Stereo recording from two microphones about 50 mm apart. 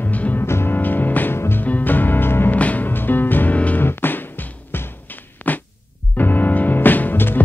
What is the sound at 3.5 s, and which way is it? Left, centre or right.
Music, left.